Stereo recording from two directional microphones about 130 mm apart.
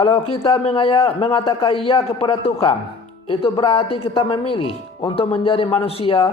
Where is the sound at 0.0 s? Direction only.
40° left (ahead or behind).